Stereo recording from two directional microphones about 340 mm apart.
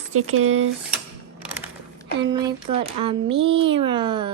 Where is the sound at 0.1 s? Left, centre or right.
Right.